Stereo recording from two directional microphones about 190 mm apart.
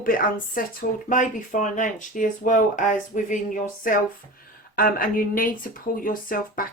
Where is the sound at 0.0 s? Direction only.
50° left (ahead or behind).